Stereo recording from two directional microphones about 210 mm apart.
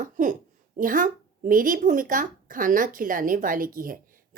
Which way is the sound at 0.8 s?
40° right (ahead or behind).